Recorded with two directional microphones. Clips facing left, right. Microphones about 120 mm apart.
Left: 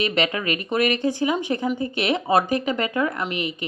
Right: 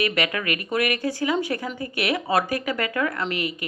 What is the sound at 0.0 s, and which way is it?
A woman's voice, 25° left (ahead or behind).